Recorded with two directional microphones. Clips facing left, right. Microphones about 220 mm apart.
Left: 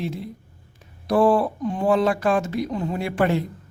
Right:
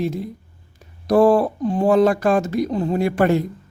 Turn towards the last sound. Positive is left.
turn(degrees=-45)  # may be behind; listen again after turning